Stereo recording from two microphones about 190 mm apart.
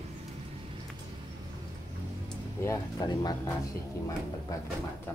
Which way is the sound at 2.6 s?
20° left (ahead or behind).